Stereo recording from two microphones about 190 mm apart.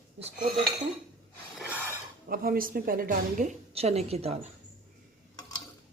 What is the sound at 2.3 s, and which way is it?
A woman's voice, 50° right (ahead or behind).